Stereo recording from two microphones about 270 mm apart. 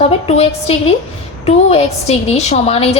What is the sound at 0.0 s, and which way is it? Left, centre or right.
A woman's voice, left.